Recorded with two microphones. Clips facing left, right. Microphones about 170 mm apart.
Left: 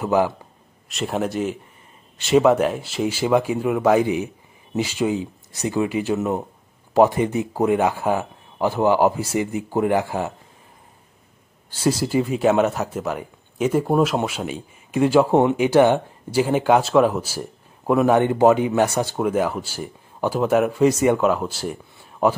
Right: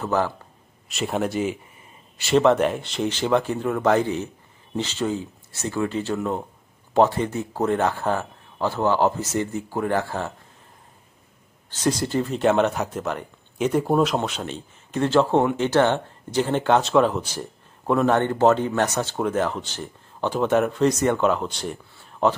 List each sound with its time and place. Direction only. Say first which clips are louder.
0.0 s speech: left 4 dB; 10° left (ahead or behind)
0.8 s speech: left 1 dB; centre (ahead or behind)
11.7 s speech: left 3 dB; 5° left (ahead or behind)